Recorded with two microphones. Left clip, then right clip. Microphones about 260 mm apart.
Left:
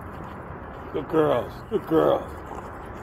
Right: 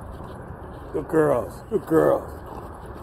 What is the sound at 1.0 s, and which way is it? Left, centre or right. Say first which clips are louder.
Speech: right 1 dB; centre.